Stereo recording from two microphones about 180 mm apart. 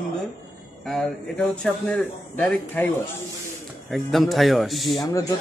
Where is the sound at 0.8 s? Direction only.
Centre (ahead or behind).